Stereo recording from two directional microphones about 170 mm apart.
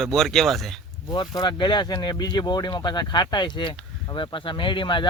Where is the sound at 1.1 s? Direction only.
25° left (ahead or behind).